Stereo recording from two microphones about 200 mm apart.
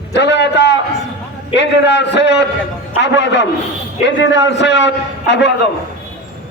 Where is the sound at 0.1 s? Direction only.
60° left (ahead or behind).